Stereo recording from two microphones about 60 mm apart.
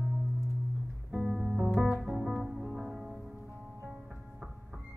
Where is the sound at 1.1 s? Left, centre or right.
Centre.